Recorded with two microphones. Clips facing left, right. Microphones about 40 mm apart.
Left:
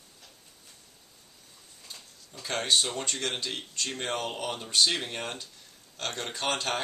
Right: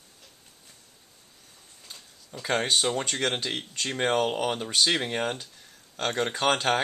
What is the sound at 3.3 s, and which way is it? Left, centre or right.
Speech, right.